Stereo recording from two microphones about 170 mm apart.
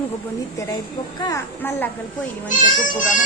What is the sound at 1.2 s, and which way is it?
Speech, 15° left (ahead or behind).